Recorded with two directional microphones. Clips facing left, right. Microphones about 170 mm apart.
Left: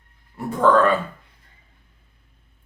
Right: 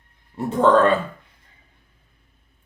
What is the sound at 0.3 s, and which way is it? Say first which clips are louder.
Speech: right 1 dB; 25° right (ahead or behind).